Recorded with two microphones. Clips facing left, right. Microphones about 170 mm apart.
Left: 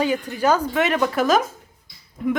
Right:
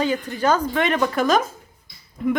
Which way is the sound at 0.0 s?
10° left (ahead or behind).